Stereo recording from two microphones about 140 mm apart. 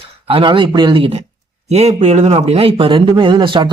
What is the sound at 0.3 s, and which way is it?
Speech, 40° right (ahead or behind).